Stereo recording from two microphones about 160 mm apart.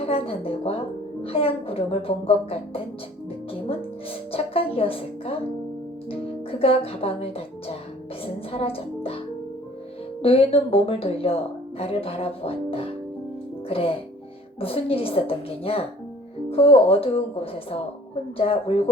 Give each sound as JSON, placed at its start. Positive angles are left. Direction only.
{"t": 0.0, "sound": "a woman's voice", "side_deg": 35}
{"t": 3.7, "sound": "music", "side_deg": 35}
{"t": 8.2, "sound": "a woman's voice", "side_deg": 35}
{"t": 10.2, "sound": "a woman's voice", "side_deg": 35}